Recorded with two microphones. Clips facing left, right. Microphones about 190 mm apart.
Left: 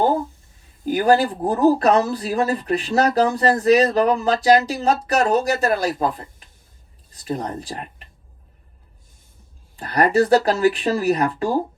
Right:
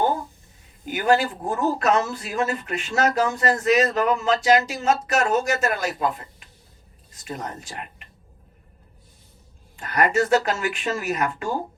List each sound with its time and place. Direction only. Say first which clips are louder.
0.9 s speech: left 4 dB; 35° left (ahead or behind)
9.7 s speech: left 4 dB; 35° left (ahead or behind)